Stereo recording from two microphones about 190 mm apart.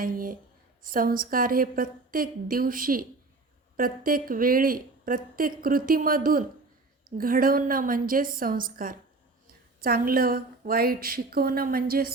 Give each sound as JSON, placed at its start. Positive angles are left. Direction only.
{"t": 0.0, "sound": "a woman's voice", "side_deg": -45}